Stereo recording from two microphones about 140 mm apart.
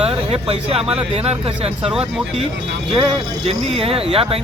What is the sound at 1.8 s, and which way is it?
Speech, 5° right (ahead or behind).